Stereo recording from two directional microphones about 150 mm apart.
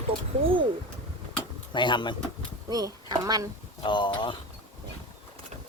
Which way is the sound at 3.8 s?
30° left (ahead or behind).